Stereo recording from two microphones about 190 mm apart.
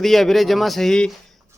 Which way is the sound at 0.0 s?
Centre (ahead or behind).